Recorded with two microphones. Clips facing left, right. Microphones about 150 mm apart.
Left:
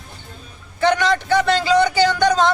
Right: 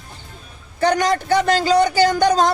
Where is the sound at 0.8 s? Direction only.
40° right (ahead or behind).